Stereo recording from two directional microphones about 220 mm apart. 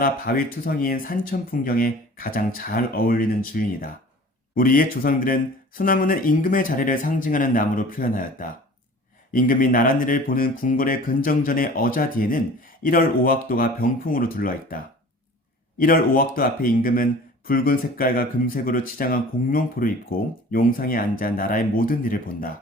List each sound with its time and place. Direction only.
0.0 s speech: 40° left (ahead or behind)
15.8 s speech: 40° left (ahead or behind)